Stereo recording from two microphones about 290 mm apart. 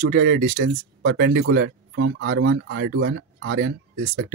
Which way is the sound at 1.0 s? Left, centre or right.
Right.